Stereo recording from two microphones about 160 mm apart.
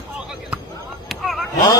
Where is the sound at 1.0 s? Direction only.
Centre (ahead or behind).